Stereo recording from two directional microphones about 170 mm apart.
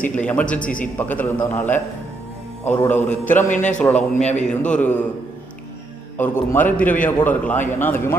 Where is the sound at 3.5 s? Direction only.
50° left (ahead or behind).